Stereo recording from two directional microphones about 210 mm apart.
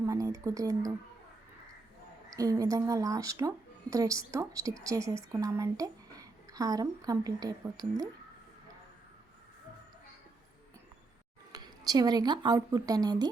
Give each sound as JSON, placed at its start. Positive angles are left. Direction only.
{"t": 0.0, "sound": "speech", "side_deg": -15}
{"t": 2.3, "sound": "speech", "side_deg": -15}
{"t": 11.5, "sound": "speech", "side_deg": -20}